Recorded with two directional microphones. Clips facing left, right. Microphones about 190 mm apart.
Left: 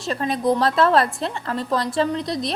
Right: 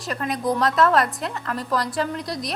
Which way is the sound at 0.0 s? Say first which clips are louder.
Left 3 dB; 25° left (ahead or behind).